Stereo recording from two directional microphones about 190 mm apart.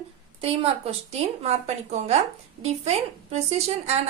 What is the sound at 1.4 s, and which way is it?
A woman's voice, 35° right (ahead or behind).